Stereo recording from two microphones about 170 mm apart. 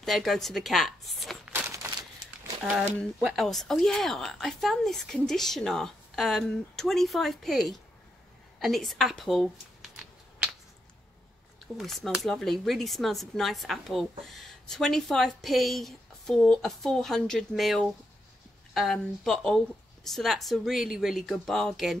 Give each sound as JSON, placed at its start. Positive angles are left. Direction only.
{"t": 0.0, "sound": "speech", "side_deg": 0}
{"t": 1.5, "sound": "crumpling", "side_deg": -15}
{"t": 3.2, "sound": "speech", "side_deg": 0}
{"t": 11.6, "sound": "speech", "side_deg": 0}